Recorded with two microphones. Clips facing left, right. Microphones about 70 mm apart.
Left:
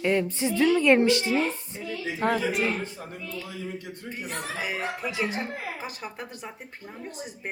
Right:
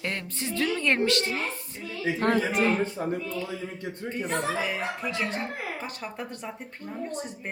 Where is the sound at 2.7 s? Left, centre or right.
Right.